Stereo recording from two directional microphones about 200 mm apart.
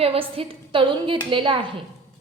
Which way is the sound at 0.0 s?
30° right (ahead or behind).